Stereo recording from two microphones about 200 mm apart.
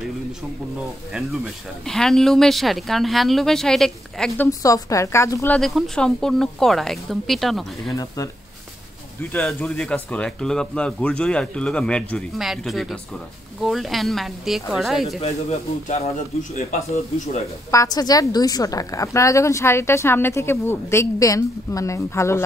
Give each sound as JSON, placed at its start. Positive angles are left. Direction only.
{"t": 1.9, "sound": "speech", "side_deg": 0}
{"t": 4.5, "sound": "a woman's voice", "side_deg": 15}
{"t": 5.6, "sound": "speech", "side_deg": 0}
{"t": 7.9, "sound": "a woman's voice", "side_deg": 15}
{"t": 9.3, "sound": "speech", "side_deg": 5}
{"t": 16.5, "sound": "speech", "side_deg": 30}
{"t": 17.6, "sound": "a woman's voice", "side_deg": 15}